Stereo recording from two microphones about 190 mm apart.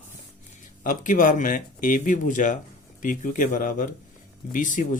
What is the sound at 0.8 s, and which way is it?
Speech, 45° left (ahead or behind).